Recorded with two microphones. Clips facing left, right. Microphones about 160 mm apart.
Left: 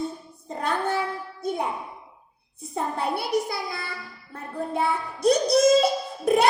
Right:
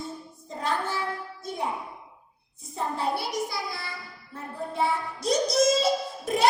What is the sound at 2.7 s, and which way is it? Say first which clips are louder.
Speech: left 1 dB; 55° left (ahead or behind).